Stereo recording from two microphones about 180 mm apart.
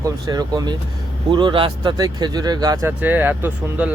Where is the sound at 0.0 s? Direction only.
20° right (ahead or behind).